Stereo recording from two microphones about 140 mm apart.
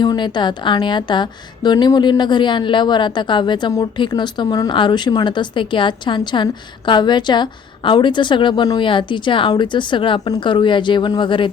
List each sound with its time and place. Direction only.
0.0 s a woman's voice: 30° left (ahead or behind)